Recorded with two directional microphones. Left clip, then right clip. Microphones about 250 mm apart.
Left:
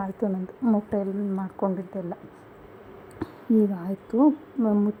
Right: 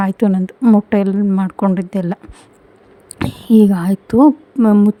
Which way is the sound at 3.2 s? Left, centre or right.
Right.